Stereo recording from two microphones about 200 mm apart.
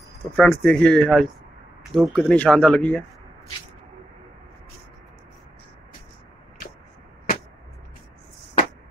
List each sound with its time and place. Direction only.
0.4 s speech: 5° left (ahead or behind)